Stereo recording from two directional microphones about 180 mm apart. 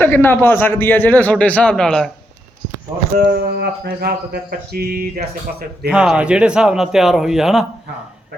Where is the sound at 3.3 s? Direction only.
65° right (ahead or behind).